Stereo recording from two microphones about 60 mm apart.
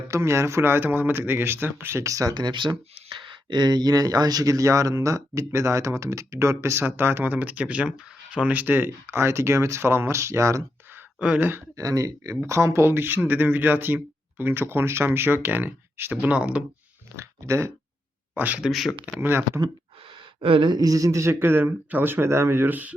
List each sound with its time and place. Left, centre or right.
0.1 s speech: right
3.8 s speech: right
6.8 s speech: right
11.3 s speech: right
11.8 s speech: right
12.5 s speech: right
16.3 s speech: right
17.2 s speech: right
18.3 s speech: right
18.7 s speech: centre
19.2 s speech: right
20.7 s speech: right